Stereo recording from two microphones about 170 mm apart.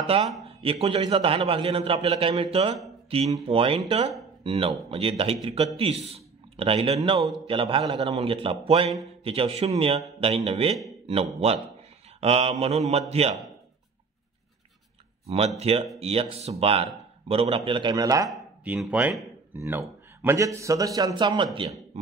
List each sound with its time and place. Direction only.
0.0 s a man's voice: 35° right (ahead or behind)
7.0 s a man's voice: 20° right (ahead or behind)
7.4 s a man's voice: 30° right (ahead or behind)
15.2 s a man's voice: 40° right (ahead or behind); by 18.3 s 20° right (ahead or behind)
18.6 s a man's voice: 10° right (ahead or behind); by 21.5 s 25° right (ahead or behind)